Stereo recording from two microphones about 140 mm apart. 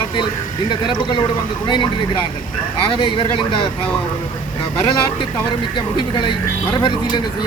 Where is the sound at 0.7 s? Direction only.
35° left (ahead or behind).